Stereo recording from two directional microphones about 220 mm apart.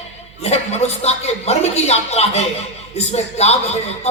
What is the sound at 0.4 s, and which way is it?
A man's voice, 30° left (ahead or behind).